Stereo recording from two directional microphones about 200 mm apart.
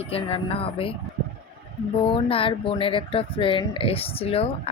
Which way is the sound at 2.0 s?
25° left (ahead or behind).